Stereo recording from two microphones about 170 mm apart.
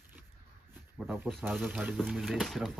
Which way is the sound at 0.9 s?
10° right (ahead or behind).